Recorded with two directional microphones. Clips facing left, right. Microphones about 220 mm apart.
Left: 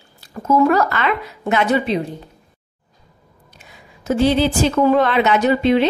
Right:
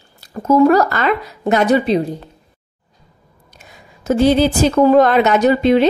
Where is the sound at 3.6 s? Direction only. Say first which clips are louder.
Right 2 dB; 45° right (ahead or behind).